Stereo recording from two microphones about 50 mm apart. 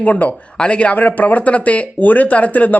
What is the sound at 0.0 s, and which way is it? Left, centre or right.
A woman's voice, left.